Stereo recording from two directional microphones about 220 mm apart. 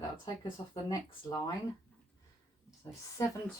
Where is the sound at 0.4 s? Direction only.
20° left (ahead or behind).